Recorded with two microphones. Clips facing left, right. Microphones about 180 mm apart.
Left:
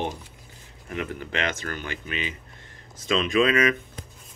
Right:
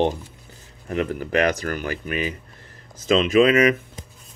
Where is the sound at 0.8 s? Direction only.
35° right (ahead or behind).